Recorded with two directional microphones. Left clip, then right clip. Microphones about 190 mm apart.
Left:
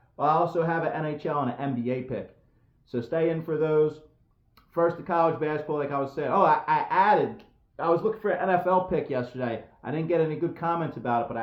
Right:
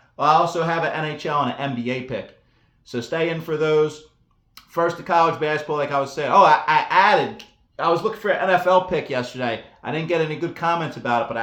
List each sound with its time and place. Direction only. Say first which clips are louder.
0.2 s speech: right 6 dB; 10° right (ahead or behind)